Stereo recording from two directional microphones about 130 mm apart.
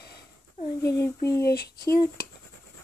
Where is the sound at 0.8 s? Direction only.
20° left (ahead or behind).